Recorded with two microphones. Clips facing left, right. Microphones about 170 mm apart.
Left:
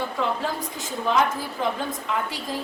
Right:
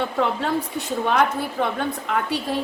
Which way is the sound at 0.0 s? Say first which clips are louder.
Right 3 dB; 65° right (ahead or behind).